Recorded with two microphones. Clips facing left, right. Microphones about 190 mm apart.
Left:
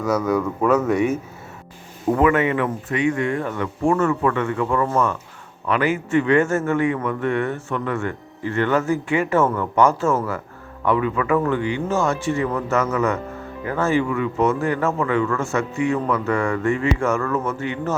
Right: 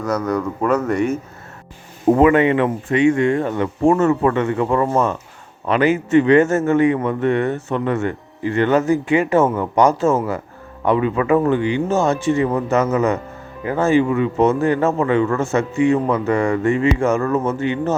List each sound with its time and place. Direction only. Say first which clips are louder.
0.0 s speech: even; 5° left (ahead or behind)
2.0 s a man's voice: right 5 dB; 25° right (ahead or behind)